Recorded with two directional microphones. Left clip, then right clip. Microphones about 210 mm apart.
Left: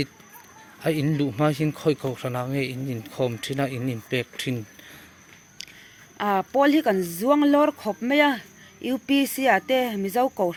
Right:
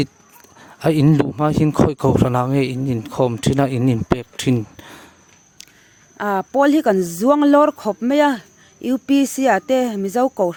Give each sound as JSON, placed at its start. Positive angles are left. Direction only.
{"t": 0.8, "sound": "speech", "side_deg": -45}
{"t": 6.1, "sound": "speech", "side_deg": -50}